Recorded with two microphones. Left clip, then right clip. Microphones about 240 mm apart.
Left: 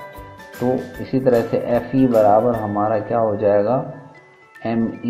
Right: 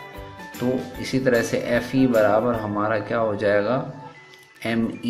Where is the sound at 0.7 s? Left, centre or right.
Centre.